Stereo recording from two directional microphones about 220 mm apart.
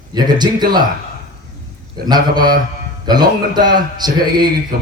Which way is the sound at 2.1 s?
20° right (ahead or behind).